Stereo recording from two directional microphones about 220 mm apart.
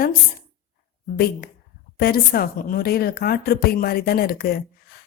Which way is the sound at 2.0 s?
45° left (ahead or behind).